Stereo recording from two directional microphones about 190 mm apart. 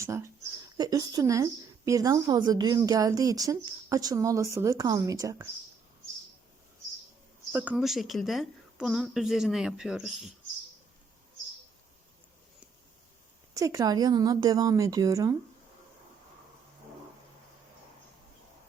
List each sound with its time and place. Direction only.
0.0 s a woman's voice: 15° right (ahead or behind)
7.5 s a woman's voice: 10° right (ahead or behind)
13.6 s speech: 15° right (ahead or behind)